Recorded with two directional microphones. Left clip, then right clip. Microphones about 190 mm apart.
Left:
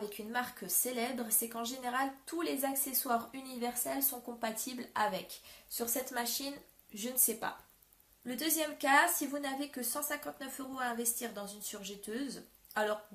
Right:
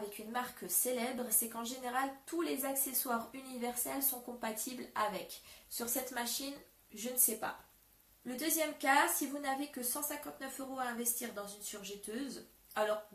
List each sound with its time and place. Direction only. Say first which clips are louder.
0.3 s a woman's voice: left 2 dB; 45° left (ahead or behind)